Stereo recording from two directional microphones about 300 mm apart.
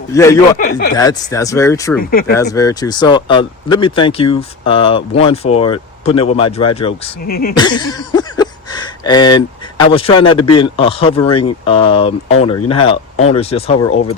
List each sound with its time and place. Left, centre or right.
0.1 s speech: centre
0.5 s speech: left
0.9 s speech: centre
2.0 s speech: left
2.3 s speech: centre
7.3 s speech: left
7.5 s a sound: centre
9.7 s speech: centre